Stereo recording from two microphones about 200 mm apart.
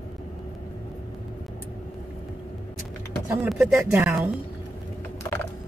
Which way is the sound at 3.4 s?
5° right (ahead or behind).